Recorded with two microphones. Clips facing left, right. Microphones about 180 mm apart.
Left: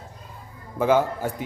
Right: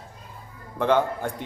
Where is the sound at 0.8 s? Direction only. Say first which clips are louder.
Left 2 dB; 5° left (ahead or behind).